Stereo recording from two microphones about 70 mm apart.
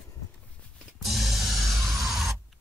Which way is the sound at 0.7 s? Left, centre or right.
Centre.